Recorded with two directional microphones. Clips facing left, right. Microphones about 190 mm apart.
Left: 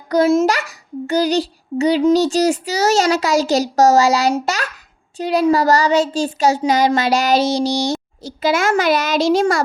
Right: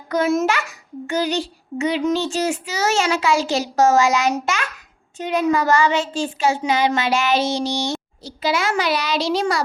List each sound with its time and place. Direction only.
0.1 s a child's voice: 30° left (ahead or behind)